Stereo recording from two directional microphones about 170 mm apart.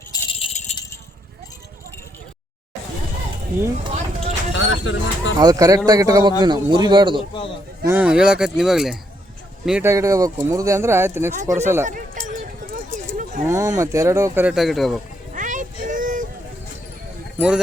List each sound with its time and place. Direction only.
0.1 s rattle: 30° left (ahead or behind)
0.5 s rattle: 45° left (ahead or behind)
4.5 s speech: 90° left
5.4 s speech: 20° right (ahead or behind)
7.9 s speech: 10° right (ahead or behind)
11.9 s a sound: 50° right (ahead or behind)
13.5 s speech: 20° right (ahead or behind)
14.5 s speech: centre (ahead or behind)
15.3 s vehicle: 50° right (ahead or behind)
17.3 s speech: 5° right (ahead or behind)